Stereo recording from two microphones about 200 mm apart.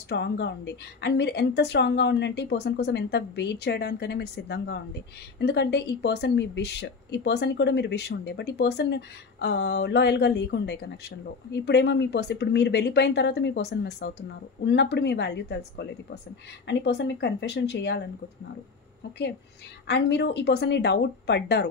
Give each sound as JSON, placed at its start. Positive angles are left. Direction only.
{"t": 0.1, "sound": "a woman's voice", "side_deg": 60}
{"t": 19.9, "sound": "a woman's voice", "side_deg": 60}